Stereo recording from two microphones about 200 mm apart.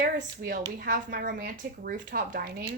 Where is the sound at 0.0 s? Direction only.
45° right (ahead or behind).